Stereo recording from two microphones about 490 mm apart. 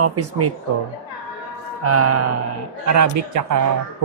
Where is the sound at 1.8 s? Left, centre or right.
Right.